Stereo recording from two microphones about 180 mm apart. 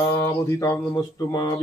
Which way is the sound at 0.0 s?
15° left (ahead or behind).